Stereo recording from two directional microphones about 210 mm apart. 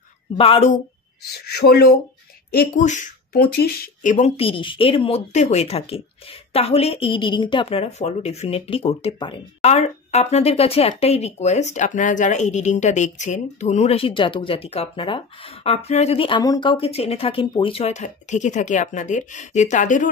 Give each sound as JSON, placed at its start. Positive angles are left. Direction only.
{"t": 0.4, "sound": "speech", "side_deg": 30}
{"t": 1.4, "sound": "speech", "side_deg": 50}